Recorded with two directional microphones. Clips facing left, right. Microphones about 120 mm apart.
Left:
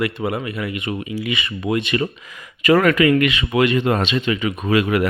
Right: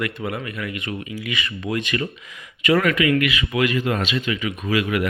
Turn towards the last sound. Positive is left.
turn(degrees=35)  # may be behind; listen again after turning